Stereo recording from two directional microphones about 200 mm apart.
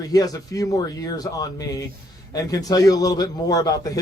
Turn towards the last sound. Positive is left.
turn(degrees=15)  # may be behind; listen again after turning